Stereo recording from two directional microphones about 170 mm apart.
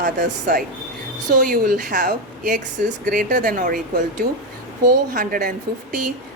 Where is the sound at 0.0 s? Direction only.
55° right (ahead or behind).